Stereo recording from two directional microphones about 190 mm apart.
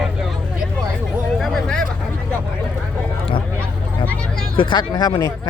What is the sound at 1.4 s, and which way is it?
Vehicle, centre (ahead or behind).